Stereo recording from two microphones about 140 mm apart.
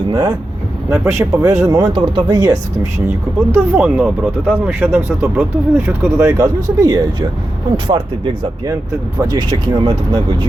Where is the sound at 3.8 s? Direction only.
10° right (ahead or behind).